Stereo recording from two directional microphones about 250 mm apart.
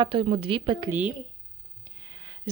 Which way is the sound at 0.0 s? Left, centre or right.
Right.